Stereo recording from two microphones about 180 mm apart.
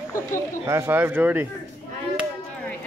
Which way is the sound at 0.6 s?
15° right (ahead or behind).